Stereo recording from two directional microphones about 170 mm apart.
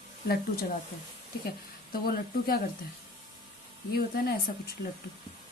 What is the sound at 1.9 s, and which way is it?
Speech, 65° left (ahead or behind).